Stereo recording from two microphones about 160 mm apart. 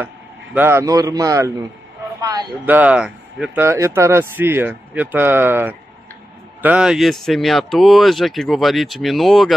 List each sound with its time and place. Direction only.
0.6 s a man's voice: 15° right (ahead or behind)
2.6 s speech: 10° right (ahead or behind)
3.6 s speech: 15° right (ahead or behind); by 9.5 s centre (ahead or behind)